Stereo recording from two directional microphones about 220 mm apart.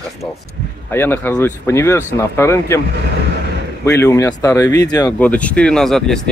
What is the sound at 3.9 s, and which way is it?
Speech, 10° left (ahead or behind).